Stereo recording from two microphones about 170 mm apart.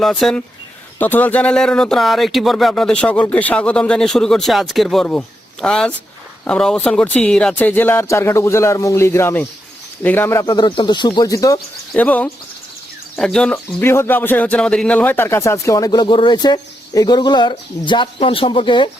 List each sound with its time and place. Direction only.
0.0 s speech: 5° left (ahead or behind); by 11.6 s 20° left (ahead or behind)
11.9 s speech: 10° left (ahead or behind); by 18.9 s 30° left (ahead or behind)